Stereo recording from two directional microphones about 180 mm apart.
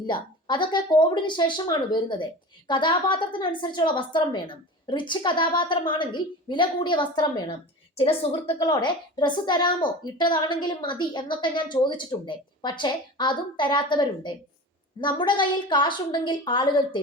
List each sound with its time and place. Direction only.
0.0 s speech: 25° left (ahead or behind)